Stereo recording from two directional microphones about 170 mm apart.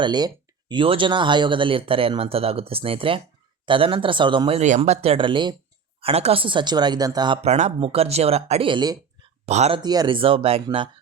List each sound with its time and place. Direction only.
0.0 s speech: 25° right (ahead or behind)
7.4 s speech: 40° right (ahead or behind)
9.5 s speech: 40° right (ahead or behind)
9.8 s speech: 25° right (ahead or behind)